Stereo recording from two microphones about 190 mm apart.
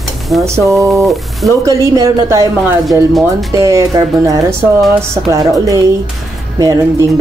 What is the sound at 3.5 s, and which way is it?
Speech, 15° right (ahead or behind).